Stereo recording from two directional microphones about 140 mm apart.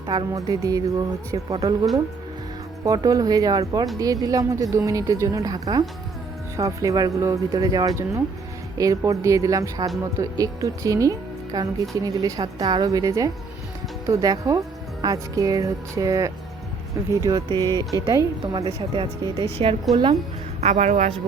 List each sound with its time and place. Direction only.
0.1 s speech: 30° right (ahead or behind)
20.6 s speech: 55° right (ahead or behind)